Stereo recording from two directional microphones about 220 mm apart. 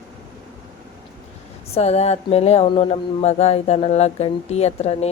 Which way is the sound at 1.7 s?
30° left (ahead or behind).